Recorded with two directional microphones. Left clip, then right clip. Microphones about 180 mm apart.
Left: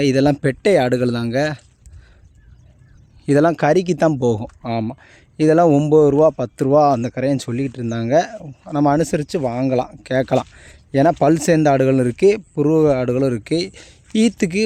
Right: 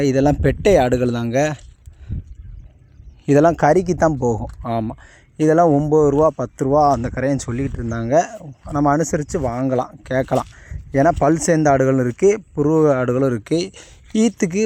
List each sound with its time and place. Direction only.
0.0 s speech: 15° left (ahead or behind)
3.2 s speech: centre (ahead or behind)
3.8 s speech: 35° left (ahead or behind)
4.6 s speech: 15° left (ahead or behind)
5.7 s speech: 25° left (ahead or behind)
7.0 s speech: 35° left (ahead or behind)
7.9 s speech: 20° left (ahead or behind)
10.9 s speech: 35° left (ahead or behind)
11.7 s speech: 15° left (ahead or behind)
12.0 s speech: 30° left (ahead or behind)
12.5 s speech: 15° left (ahead or behind)